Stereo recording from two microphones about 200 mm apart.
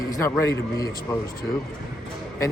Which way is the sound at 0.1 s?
15° left (ahead or behind).